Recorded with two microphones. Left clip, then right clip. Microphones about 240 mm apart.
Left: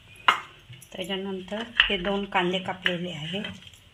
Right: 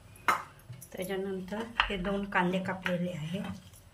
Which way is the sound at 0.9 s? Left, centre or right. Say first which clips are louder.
Left 3 dB; left.